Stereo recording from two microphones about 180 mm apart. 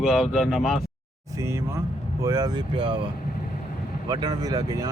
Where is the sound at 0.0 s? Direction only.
Centre (ahead or behind).